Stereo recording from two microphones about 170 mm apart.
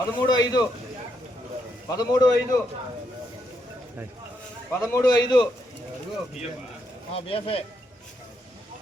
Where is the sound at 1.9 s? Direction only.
20° left (ahead or behind).